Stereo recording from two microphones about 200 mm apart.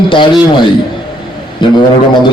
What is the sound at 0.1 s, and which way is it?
Speech, 25° left (ahead or behind).